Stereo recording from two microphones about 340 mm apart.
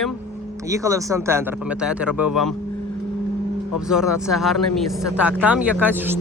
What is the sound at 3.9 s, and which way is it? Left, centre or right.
Speech, centre.